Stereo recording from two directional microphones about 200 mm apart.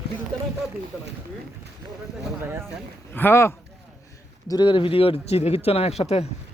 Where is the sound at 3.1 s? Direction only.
10° left (ahead or behind); by 6.2 s 30° left (ahead or behind).